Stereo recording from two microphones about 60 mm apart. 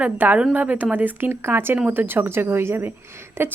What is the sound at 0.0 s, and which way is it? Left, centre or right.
A woman's voice, right.